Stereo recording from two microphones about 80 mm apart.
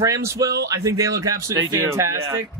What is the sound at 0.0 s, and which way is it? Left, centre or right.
Speech, right.